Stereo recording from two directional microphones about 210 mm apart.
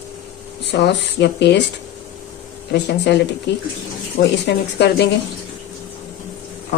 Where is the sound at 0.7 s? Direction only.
55° left (ahead or behind).